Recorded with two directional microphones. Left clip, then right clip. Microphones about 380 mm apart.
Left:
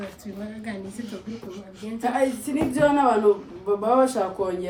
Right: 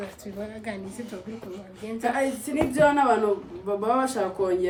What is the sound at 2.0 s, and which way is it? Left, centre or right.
Speech, centre.